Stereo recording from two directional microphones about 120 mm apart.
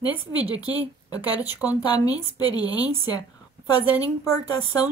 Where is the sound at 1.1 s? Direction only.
35° left (ahead or behind).